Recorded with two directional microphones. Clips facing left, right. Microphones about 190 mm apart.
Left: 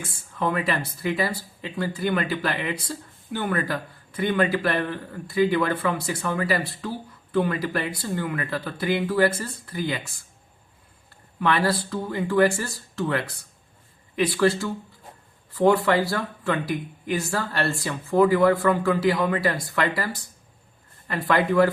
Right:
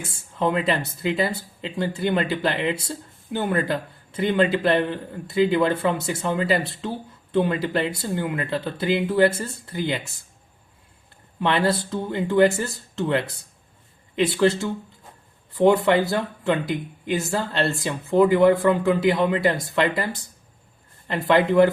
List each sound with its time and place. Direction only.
0.0 s speech: 25° right (ahead or behind)
11.3 s speech: 25° right (ahead or behind)
21.1 s speech: 20° right (ahead or behind)